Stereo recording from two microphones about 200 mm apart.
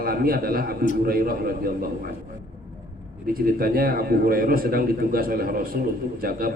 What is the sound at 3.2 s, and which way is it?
A man's voice, 45° right (ahead or behind).